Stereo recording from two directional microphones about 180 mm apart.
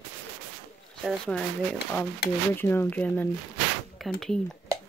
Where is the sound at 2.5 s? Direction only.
10° left (ahead or behind).